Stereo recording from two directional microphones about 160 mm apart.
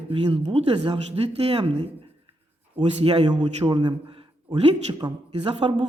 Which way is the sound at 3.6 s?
30° right (ahead or behind).